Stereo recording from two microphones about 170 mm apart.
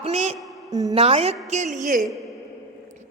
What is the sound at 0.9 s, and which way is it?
A woman's voice, 35° right (ahead or behind).